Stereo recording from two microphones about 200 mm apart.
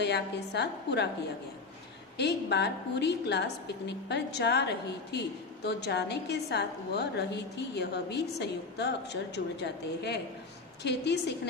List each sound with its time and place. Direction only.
0.0 s a woman's voice: 60° left (ahead or behind)
2.1 s a woman's voice: 55° left (ahead or behind)